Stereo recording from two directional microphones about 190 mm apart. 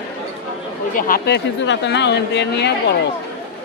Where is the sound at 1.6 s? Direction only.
70° left (ahead or behind).